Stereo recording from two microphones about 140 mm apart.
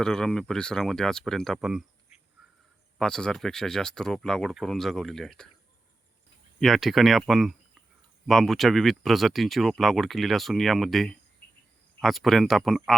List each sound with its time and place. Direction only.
0.0 s speech: 5° left (ahead or behind)
3.0 s speech: 5° left (ahead or behind)
6.6 s speech: centre (ahead or behind)